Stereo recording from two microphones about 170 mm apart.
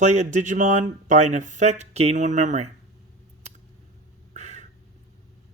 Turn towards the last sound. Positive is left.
turn(degrees=-40)  # may be behind; listen again after turning